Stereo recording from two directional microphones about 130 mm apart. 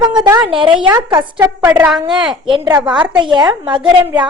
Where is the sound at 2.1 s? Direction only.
5° right (ahead or behind).